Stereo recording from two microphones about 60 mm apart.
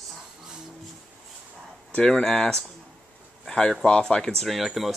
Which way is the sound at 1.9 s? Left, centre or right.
Centre.